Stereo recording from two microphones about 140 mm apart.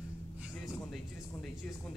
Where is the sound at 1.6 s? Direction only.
5° left (ahead or behind).